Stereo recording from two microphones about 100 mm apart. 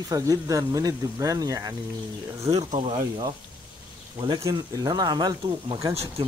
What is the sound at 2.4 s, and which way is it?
Speech, 90° right.